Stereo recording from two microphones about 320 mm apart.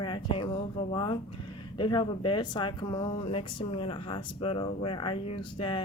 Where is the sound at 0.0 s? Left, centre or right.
Centre.